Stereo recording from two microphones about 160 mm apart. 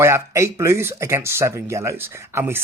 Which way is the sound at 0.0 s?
15° right (ahead or behind).